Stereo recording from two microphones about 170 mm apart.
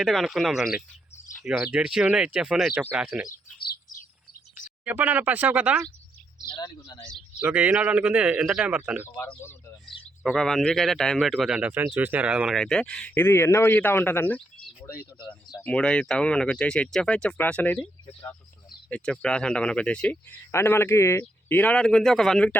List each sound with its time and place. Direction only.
0.0 s speech: centre (ahead or behind)
4.9 s speech: 10° right (ahead or behind)
6.6 s speech: 25° left (ahead or behind)
7.3 s speech: 5° right (ahead or behind)
9.1 s speech: 10° left (ahead or behind)
9.8 s speech: centre (ahead or behind)
15.6 s speech: 5° left (ahead or behind)
18.9 s speech: 5° left (ahead or behind)